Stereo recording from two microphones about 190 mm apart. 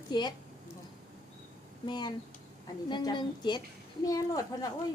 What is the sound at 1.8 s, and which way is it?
A woman's voice, 25° left (ahead or behind).